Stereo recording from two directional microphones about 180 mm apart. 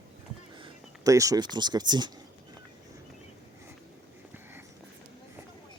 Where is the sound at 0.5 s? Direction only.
25° right (ahead or behind).